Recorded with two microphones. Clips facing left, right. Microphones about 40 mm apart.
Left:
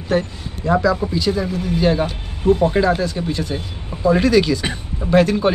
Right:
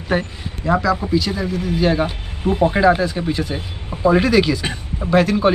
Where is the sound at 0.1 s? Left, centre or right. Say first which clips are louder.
Left 2 dB; centre.